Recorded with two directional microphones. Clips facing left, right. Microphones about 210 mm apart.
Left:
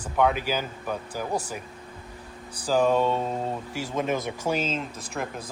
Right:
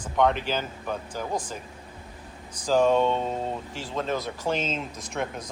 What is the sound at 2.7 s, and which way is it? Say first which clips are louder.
Speech: right 1 dB; 5° left (ahead or behind).